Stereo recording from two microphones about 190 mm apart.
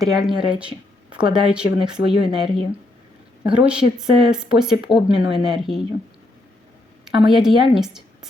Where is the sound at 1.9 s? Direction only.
60° left (ahead or behind).